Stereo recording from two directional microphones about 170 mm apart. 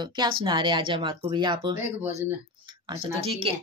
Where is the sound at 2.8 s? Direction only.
35° right (ahead or behind).